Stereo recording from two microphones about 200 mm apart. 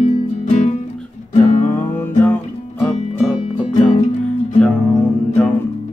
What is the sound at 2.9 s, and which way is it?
Music, 35° left (ahead or behind).